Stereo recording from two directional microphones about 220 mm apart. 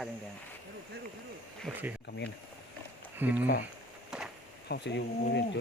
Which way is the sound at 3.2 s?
5° right (ahead or behind).